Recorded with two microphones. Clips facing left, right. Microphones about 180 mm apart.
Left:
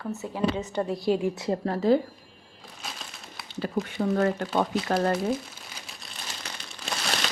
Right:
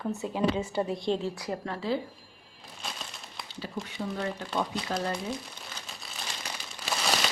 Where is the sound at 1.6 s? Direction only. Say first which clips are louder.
Left 9 dB; 40° left (ahead or behind).